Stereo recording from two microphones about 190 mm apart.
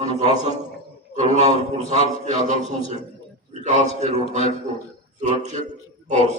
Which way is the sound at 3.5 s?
40° right (ahead or behind).